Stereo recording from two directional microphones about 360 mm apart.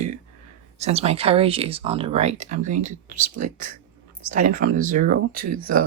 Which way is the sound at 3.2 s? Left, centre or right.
Right.